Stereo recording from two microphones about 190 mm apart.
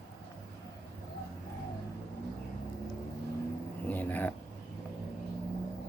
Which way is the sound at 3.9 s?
10° left (ahead or behind).